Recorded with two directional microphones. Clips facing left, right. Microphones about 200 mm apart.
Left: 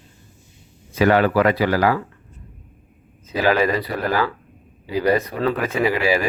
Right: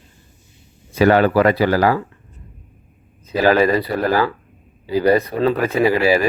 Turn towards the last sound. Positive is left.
turn(degrees=-35)  # may be behind; listen again after turning